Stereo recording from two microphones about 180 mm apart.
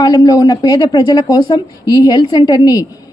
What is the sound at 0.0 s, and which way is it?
A woman's voice, 20° left (ahead or behind).